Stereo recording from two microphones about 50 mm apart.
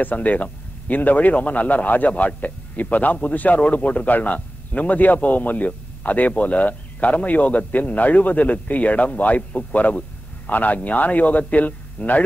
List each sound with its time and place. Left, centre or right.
0.0 s a man's voice: left